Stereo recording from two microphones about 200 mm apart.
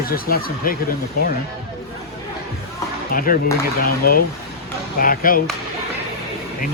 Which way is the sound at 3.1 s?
45° left (ahead or behind).